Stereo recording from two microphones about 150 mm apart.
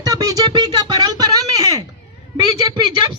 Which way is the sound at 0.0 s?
25° right (ahead or behind).